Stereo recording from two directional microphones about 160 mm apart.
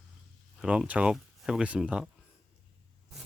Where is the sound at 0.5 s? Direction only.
5° right (ahead or behind).